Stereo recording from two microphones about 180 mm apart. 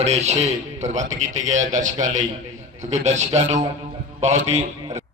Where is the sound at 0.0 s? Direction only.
40° right (ahead or behind).